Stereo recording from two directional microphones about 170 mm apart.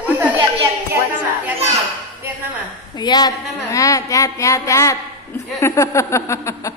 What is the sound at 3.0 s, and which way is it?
A woman's voice, 25° left (ahead or behind).